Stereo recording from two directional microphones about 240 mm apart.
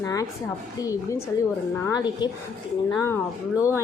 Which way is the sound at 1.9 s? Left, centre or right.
Centre.